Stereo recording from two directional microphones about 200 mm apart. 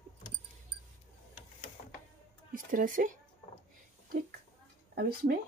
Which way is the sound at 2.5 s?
45° right (ahead or behind).